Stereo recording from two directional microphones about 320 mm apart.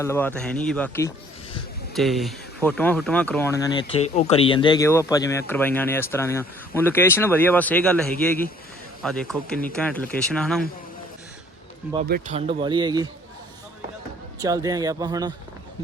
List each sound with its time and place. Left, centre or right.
0.0 s speech: centre
12.0 s speech: right
14.4 s speech: centre